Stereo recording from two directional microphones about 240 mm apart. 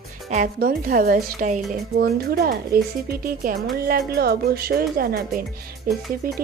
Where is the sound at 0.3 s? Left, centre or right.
Right.